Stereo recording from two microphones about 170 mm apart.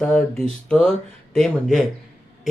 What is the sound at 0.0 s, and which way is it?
Speech, 5° left (ahead or behind).